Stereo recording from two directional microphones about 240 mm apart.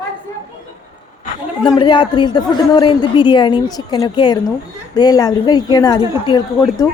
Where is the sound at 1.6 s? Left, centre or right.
Centre.